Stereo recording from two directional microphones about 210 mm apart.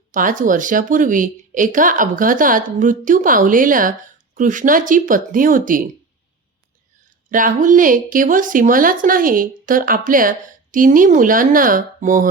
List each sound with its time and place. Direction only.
0.1 s speech: 40° right (ahead or behind)
7.3 s speech: 40° right (ahead or behind)